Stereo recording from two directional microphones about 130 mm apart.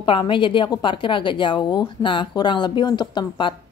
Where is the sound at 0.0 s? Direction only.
40° left (ahead or behind).